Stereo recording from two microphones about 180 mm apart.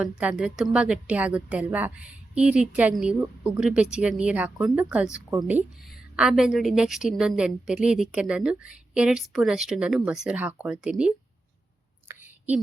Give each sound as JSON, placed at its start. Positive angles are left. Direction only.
{"t": 0.0, "sound": "speech", "side_deg": -5}
{"t": 6.1, "sound": "a woman's voice", "side_deg": -5}
{"t": 12.1, "sound": "a sound", "side_deg": -10}